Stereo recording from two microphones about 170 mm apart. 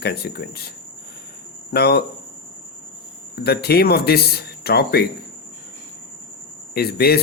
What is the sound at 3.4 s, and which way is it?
Speech, 70° left (ahead or behind).